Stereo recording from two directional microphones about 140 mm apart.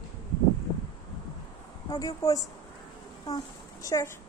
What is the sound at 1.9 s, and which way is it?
A child's voice, 25° left (ahead or behind).